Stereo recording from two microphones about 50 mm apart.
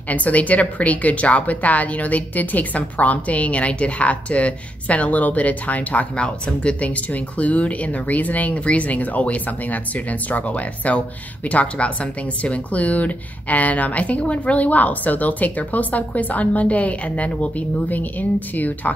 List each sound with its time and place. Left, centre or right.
0.1 s a woman's voice: left